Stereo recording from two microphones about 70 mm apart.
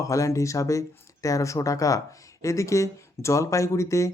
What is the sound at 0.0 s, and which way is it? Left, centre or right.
Speech, left.